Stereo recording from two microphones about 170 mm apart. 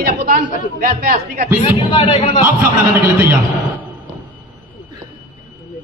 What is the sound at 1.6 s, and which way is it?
Speech, 30° left (ahead or behind).